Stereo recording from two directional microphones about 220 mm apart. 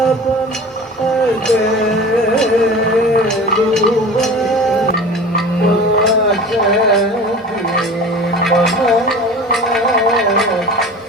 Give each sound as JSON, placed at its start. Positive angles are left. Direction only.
{"t": 8.4, "sound": "gargling", "side_deg": 0}